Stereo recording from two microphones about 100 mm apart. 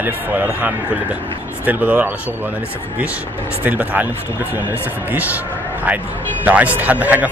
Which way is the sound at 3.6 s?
15° right (ahead or behind).